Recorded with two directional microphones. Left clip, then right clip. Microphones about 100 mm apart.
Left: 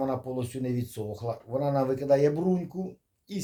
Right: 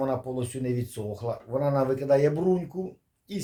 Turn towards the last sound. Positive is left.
turn(degrees=25)  # may be behind; listen again after turning